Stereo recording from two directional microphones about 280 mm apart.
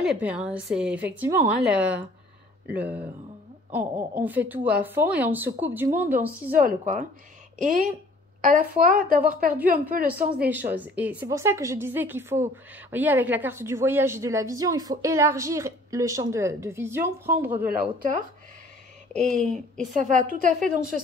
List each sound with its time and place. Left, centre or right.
0.0 s a woman's voice: centre
6.6 s a woman's voice: right
10.0 s a woman's voice: centre
19.1 s a woman's voice: right